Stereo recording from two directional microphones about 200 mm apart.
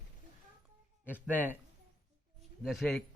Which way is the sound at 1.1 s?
10° right (ahead or behind).